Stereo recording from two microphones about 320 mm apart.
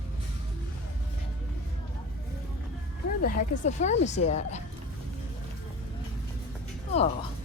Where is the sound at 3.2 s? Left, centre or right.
Left.